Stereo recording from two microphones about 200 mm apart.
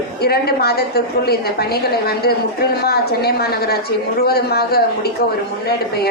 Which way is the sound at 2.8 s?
50° left (ahead or behind).